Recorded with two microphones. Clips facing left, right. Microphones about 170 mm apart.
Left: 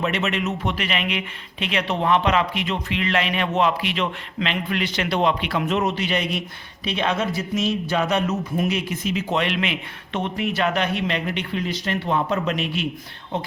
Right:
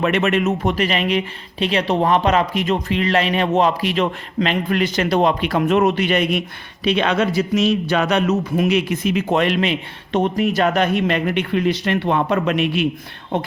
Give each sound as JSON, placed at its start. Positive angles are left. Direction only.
{"t": 0.0, "sound": "speech", "side_deg": -55}
{"t": 6.8, "sound": "speech", "side_deg": -75}